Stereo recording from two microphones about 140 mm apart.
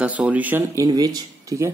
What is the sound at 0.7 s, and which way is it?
Speech, 25° right (ahead or behind).